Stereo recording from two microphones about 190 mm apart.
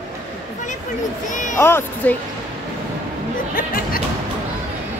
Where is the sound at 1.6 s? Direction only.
10° left (ahead or behind).